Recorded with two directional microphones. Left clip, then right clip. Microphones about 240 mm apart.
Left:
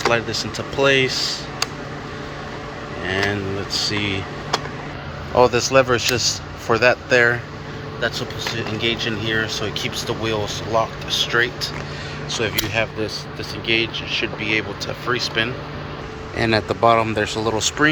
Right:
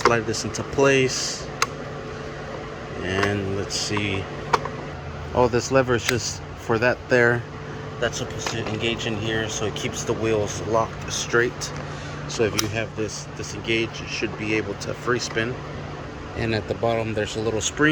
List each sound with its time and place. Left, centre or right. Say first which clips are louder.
0.1 s speech: left 3 dB; right
3.8 s speech: left 3 dB; centre
16.4 s speech: left 7 dB; centre